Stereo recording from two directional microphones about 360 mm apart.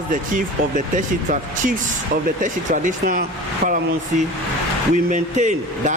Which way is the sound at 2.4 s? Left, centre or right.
Right.